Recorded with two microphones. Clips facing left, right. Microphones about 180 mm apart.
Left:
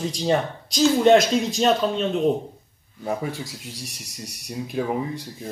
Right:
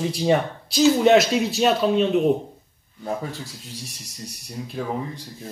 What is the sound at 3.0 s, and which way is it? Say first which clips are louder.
Speech: left 2 dB; 15° left (ahead or behind).